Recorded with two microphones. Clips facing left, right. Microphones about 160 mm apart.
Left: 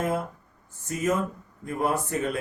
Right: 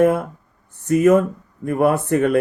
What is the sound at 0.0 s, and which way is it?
Speech, 65° right (ahead or behind).